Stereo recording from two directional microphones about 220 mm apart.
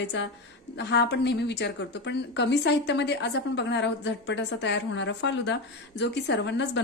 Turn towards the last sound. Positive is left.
turn(degrees=55)  # may be behind; listen again after turning